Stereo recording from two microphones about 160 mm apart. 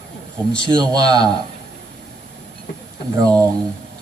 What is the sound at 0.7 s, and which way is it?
Speech, 25° right (ahead or behind).